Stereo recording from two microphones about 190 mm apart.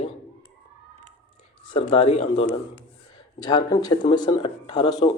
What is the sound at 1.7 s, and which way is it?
Speech, 25° left (ahead or behind).